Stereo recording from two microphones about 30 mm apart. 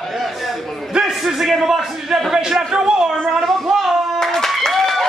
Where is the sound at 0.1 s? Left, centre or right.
Centre.